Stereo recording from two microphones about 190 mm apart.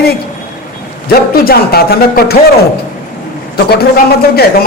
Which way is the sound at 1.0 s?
55° left (ahead or behind).